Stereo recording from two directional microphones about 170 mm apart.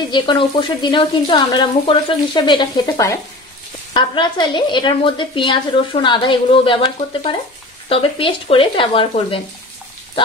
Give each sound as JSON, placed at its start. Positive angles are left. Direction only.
{"t": 0.1, "sound": "speech", "side_deg": 30}
{"t": 7.9, "sound": "frying", "side_deg": 30}